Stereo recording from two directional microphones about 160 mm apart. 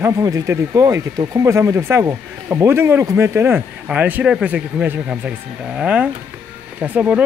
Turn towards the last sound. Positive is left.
turn(degrees=-10)  # may be behind; listen again after turning